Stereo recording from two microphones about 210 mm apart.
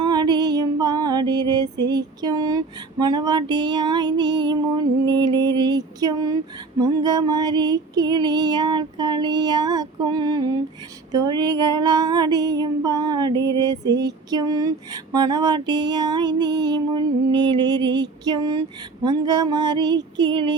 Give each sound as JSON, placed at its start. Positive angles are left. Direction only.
{"t": 0.0, "sound": "female singing", "side_deg": -20}